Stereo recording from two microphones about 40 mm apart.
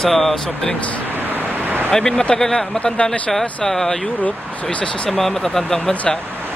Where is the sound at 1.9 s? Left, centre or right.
Centre.